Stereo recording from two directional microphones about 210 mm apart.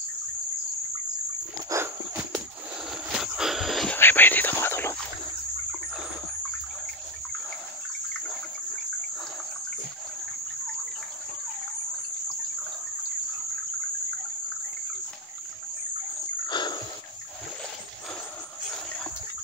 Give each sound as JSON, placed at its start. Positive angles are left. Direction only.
{"t": 1.7, "sound": "dog", "side_deg": -10}
{"t": 2.9, "sound": "whispering", "side_deg": 0}
{"t": 16.4, "sound": "a sound", "side_deg": 20}